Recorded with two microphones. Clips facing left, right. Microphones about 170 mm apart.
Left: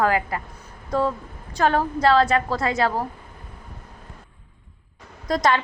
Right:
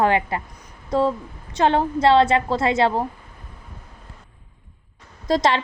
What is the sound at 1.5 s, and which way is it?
A woman's voice, 25° right (ahead or behind).